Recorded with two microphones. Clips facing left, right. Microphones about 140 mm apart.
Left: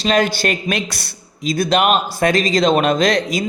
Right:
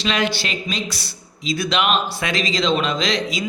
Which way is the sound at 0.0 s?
45° left (ahead or behind).